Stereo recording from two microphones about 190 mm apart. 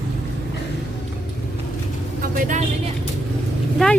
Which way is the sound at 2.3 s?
45° right (ahead or behind).